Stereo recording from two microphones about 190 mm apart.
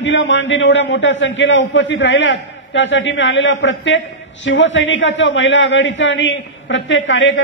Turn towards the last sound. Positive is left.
turn(degrees=75)  # may be behind; listen again after turning